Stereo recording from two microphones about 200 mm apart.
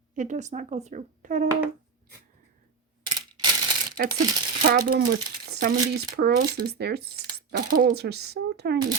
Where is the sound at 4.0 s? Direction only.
50° right (ahead or behind).